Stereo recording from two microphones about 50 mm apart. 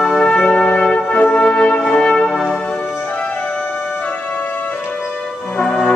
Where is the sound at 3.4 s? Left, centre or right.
Left.